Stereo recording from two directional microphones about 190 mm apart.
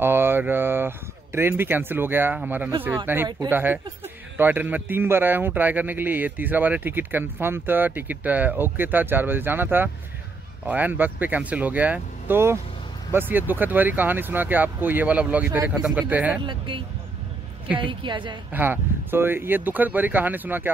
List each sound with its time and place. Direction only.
0.0 s a man's voice: 10° right (ahead or behind)
16.3 s a woman's voice: 25° right (ahead or behind)
18.5 s a man's voice: 10° right (ahead or behind)